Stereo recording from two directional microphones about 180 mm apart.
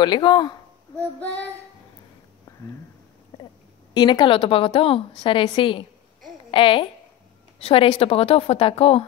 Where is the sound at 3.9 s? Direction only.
25° left (ahead or behind).